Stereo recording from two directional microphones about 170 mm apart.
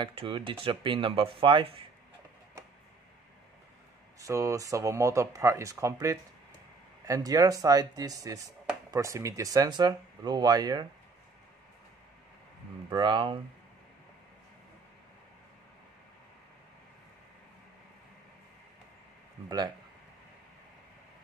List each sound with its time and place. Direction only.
0.0 s speech: 30° right (ahead or behind)
4.2 s speech: 20° right (ahead or behind)
12.9 s speech: 25° right (ahead or behind)